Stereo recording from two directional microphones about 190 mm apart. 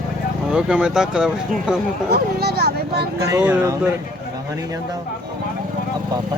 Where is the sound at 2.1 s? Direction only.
55° right (ahead or behind).